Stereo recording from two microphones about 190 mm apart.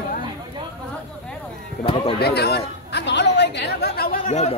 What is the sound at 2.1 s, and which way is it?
Chatter, 55° left (ahead or behind).